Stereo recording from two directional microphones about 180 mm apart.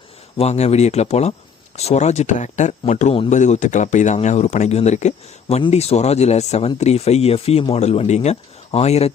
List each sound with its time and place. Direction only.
0.3 s speech: 35° left (ahead or behind)